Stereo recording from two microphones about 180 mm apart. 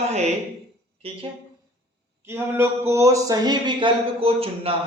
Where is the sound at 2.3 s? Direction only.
15° right (ahead or behind).